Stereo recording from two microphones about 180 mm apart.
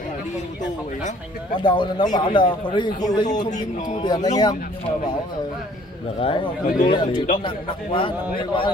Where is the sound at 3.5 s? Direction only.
45° left (ahead or behind).